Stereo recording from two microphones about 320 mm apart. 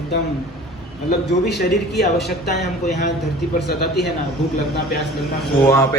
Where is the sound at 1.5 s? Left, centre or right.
Left.